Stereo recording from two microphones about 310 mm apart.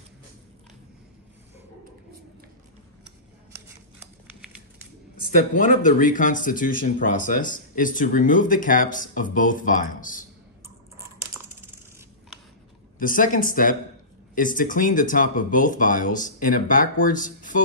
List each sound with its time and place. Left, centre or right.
4.0 s a sound: centre
5.5 s speech: left
13.0 s speech: left